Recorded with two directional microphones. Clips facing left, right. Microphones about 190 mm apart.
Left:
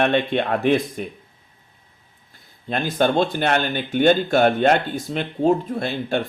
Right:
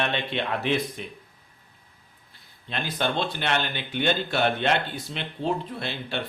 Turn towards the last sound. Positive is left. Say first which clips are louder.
# left 9 dB
turn(degrees=45)  # may be behind; listen again after turning